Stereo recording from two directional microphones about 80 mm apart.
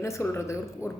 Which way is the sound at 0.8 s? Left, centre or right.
Centre.